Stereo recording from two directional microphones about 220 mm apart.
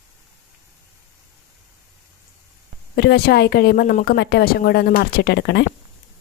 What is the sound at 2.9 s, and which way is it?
A woman's voice, 45° left (ahead or behind).